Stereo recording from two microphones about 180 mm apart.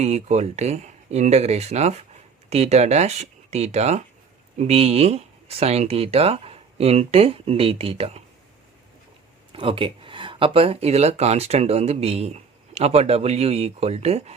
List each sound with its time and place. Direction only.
0.0 s speech: 40° right (ahead or behind)
9.5 s speech: 30° right (ahead or behind)